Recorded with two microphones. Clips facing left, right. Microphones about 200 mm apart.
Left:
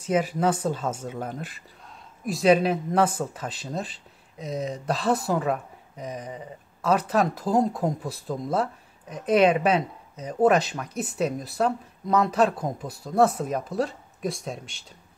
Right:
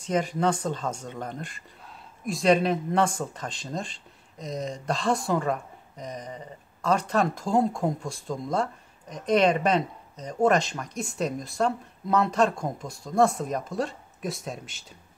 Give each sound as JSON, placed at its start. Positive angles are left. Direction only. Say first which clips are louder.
{"t": 0.0, "sound": "speech", "louder": "left 2 dB", "side_deg": 5}